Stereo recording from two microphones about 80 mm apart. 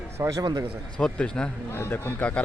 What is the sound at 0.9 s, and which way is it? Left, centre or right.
Speech, centre.